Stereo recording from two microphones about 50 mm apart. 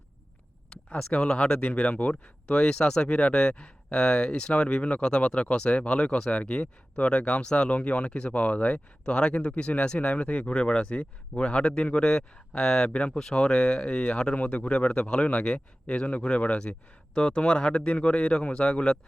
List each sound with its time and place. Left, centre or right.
0.7 s speech: centre
12.9 s speech: left